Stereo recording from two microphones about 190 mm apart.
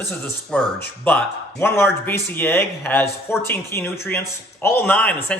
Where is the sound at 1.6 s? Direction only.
10° left (ahead or behind).